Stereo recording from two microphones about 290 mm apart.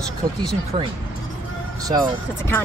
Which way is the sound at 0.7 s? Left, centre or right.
Centre.